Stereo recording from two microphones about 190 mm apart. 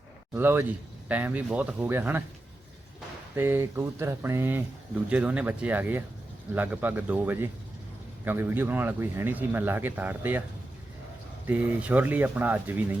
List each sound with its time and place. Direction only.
0.3 s speech: 10° right (ahead or behind)
3.3 s speech: 10° right (ahead or behind)
11.4 s speech: 10° right (ahead or behind)